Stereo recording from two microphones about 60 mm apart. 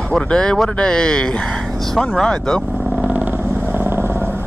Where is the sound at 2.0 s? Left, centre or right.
Centre.